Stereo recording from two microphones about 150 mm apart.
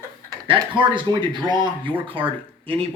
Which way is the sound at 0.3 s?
35° right (ahead or behind).